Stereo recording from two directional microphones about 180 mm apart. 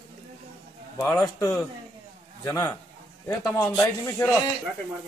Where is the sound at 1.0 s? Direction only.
15° left (ahead or behind).